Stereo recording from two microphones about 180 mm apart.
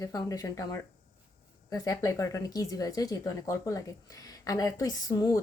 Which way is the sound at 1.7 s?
20° left (ahead or behind).